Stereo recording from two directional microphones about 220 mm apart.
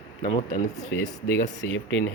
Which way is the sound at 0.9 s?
50° left (ahead or behind).